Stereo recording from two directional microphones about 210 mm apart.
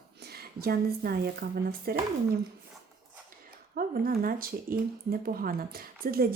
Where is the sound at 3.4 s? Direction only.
45° right (ahead or behind).